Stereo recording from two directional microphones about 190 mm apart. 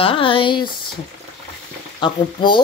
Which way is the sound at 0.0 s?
25° left (ahead or behind).